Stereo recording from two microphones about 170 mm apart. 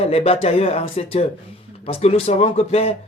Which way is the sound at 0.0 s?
35° left (ahead or behind).